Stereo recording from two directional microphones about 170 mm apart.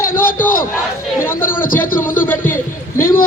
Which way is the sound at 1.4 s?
55° left (ahead or behind).